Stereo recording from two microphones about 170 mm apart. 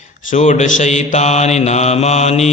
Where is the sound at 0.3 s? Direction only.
45° left (ahead or behind).